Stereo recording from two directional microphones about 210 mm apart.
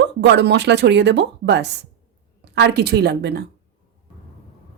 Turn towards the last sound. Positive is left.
turn(degrees=-50)  # may be behind; listen again after turning